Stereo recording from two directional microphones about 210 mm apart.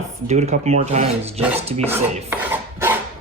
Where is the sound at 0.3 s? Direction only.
30° right (ahead or behind).